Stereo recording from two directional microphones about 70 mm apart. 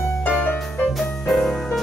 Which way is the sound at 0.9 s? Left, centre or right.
Centre.